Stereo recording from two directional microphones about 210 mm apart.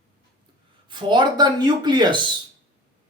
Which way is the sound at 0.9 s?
20° right (ahead or behind).